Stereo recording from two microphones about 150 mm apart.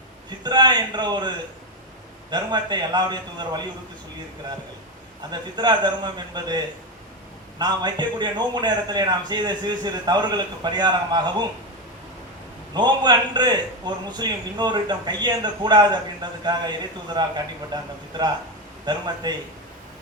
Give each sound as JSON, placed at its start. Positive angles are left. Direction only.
{"t": 0.3, "sound": "a man's voice", "side_deg": -30}
{"t": 2.3, "sound": "a man's voice", "side_deg": -30}
{"t": 5.3, "sound": "a man's voice", "side_deg": -30}
{"t": 7.6, "sound": "a man's voice", "side_deg": -30}
{"t": 12.7, "sound": "a man's voice", "side_deg": -30}